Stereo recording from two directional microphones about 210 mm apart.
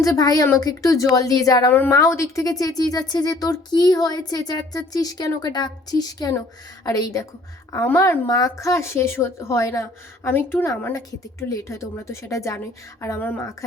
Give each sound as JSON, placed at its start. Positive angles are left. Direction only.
{"t": 0.0, "sound": "a woman's voice", "side_deg": 15}